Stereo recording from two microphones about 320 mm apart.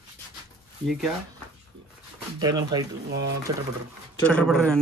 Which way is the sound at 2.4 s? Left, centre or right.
Centre.